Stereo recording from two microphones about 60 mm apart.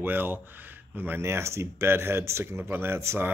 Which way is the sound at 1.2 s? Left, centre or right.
Right.